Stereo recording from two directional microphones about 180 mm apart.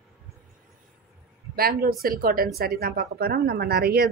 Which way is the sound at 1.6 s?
55° right (ahead or behind).